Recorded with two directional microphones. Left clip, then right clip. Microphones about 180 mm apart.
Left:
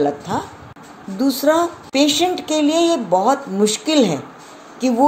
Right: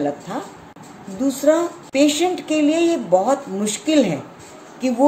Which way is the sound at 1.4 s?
20° left (ahead or behind).